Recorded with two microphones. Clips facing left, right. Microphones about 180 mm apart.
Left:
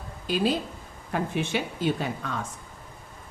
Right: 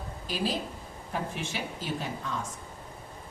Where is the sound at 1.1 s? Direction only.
65° left (ahead or behind).